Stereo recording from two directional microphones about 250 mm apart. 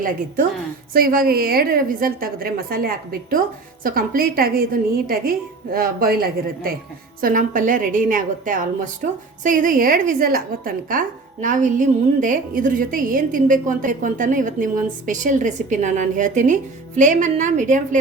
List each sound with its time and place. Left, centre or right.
0.9 s a woman's voice: right